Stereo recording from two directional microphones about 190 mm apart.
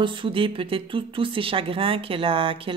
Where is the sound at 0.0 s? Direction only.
25° right (ahead or behind).